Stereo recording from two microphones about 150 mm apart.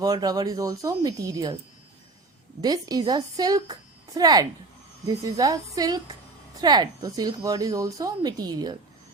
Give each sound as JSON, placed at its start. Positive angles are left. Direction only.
{"t": 0.0, "sound": "a woman's voice", "side_deg": -25}
{"t": 2.6, "sound": "a woman's voice", "side_deg": -25}